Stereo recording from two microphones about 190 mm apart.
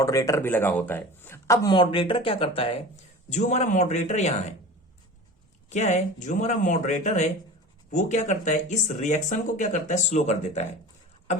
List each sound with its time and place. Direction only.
0.0 s speech: 15° left (ahead or behind); by 4.5 s 35° left (ahead or behind)
5.6 s speech: 40° left (ahead or behind)